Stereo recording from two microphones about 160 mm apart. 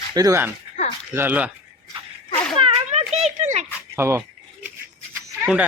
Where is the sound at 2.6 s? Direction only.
35° right (ahead or behind).